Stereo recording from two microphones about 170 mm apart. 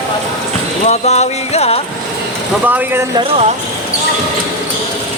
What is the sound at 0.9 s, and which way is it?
Music, 40° left (ahead or behind).